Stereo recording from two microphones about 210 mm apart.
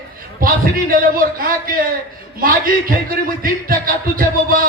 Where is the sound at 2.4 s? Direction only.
45° right (ahead or behind).